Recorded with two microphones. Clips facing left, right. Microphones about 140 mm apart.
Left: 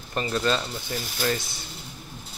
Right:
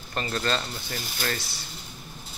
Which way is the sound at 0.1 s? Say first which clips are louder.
Left 3 dB; 10° left (ahead or behind).